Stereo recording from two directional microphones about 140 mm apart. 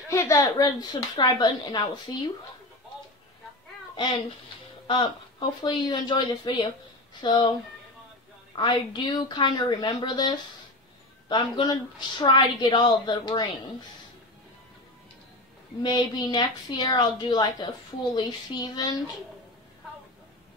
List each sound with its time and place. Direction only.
0.1 s a woman's voice: 20° left (ahead or behind)
4.8 s a woman's voice: 35° left (ahead or behind)
8.5 s a woman's voice: 30° left (ahead or behind)
15.8 s a woman's voice: 30° left (ahead or behind)